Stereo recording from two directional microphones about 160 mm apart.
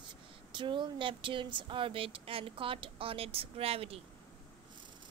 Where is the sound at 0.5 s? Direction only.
30° right (ahead or behind).